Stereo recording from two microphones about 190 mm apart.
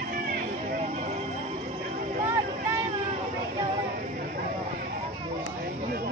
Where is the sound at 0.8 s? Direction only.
35° right (ahead or behind).